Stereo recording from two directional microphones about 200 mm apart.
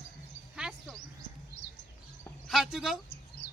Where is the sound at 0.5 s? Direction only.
5° right (ahead or behind).